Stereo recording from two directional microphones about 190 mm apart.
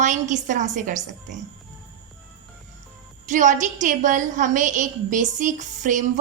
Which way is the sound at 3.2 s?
40° right (ahead or behind).